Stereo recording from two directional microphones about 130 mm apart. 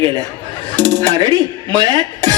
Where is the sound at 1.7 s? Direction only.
30° right (ahead or behind).